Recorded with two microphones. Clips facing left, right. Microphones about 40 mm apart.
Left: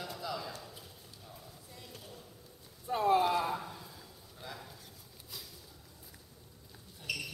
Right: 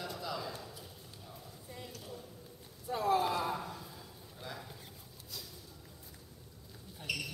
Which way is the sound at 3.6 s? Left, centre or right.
Centre.